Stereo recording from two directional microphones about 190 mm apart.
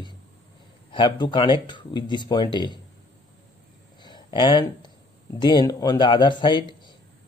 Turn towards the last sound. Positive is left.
turn(degrees=25)  # may be behind; listen again after turning